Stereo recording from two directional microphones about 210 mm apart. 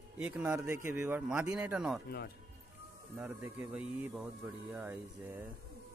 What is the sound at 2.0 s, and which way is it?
Speech, 50° left (ahead or behind).